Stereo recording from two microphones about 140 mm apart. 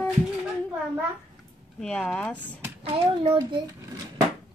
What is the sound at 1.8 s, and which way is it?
Speech, 5° left (ahead or behind).